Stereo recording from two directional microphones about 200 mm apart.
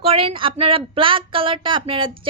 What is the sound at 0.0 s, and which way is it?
Speech, 30° right (ahead or behind).